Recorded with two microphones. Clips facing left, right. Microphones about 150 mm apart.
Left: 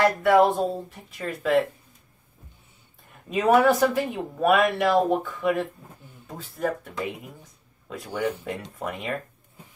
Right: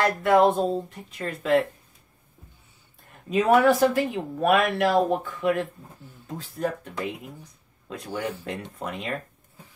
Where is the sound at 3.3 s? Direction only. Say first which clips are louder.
Even; centre (ahead or behind).